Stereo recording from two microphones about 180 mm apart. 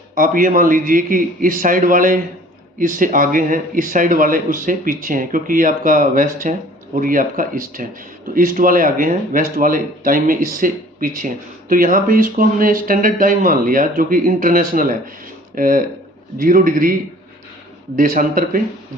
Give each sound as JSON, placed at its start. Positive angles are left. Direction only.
{"t": 0.2, "sound": "speech", "side_deg": -50}
{"t": 17.9, "sound": "speech", "side_deg": -50}